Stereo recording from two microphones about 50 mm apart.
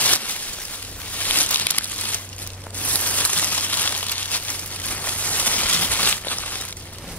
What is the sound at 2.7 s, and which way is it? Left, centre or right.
Crumpling, left.